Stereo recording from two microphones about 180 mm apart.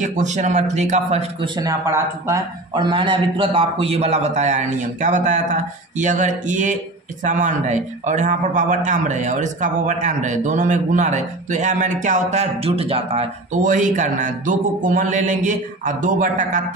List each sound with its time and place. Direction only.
0.0 s a man's voice: 40° right (ahead or behind)
1.4 s a man's voice: 20° right (ahead or behind); by 16.6 s 45° right (ahead or behind)